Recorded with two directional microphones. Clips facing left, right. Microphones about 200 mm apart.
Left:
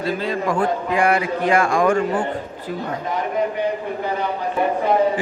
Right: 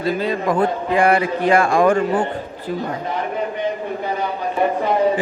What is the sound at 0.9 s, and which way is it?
A man's voice, 35° right (ahead or behind).